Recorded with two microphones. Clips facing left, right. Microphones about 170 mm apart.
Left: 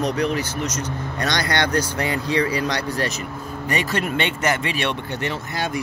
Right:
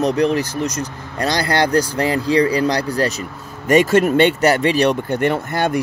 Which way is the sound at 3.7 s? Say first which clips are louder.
Right 11 dB; 45° right (ahead or behind).